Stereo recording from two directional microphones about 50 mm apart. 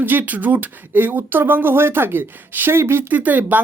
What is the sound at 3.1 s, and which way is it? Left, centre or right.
Speech, right.